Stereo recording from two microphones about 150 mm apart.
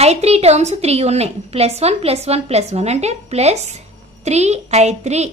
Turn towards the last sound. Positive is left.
turn(degrees=-50)  # may be behind; listen again after turning